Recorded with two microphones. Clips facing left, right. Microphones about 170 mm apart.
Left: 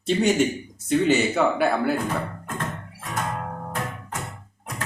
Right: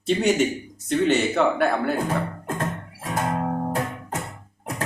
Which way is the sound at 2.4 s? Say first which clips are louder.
Right 3 dB; 30° right (ahead or behind).